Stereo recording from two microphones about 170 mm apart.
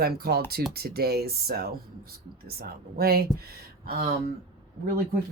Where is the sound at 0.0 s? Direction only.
65° right (ahead or behind).